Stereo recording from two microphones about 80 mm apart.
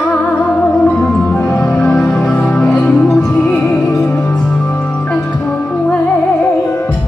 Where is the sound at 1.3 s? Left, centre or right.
Centre.